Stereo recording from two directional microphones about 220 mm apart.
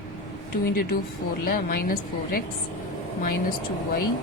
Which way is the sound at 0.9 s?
40° left (ahead or behind).